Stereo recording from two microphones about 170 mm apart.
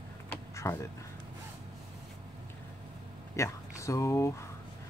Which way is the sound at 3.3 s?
20° left (ahead or behind).